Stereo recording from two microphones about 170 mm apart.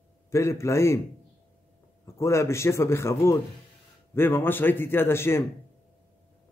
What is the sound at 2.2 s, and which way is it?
A man's voice, 15° left (ahead or behind).